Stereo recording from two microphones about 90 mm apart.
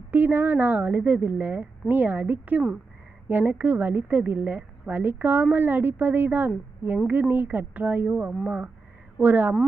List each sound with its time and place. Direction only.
0.1 s a woman's voice: 20° right (ahead or behind)
8.3 s a woman's voice: 10° right (ahead or behind)